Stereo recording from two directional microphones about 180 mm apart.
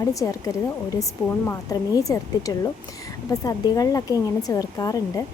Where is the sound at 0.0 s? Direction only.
20° left (ahead or behind).